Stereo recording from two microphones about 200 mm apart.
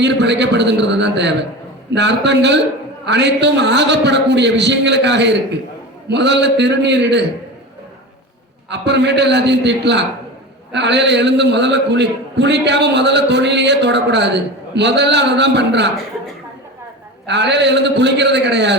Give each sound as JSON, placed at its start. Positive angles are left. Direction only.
{"t": 0.0, "sound": "a man's voice", "side_deg": -60}
{"t": 8.7, "sound": "a man's voice", "side_deg": -60}
{"t": 17.2, "sound": "a man's voice", "side_deg": -60}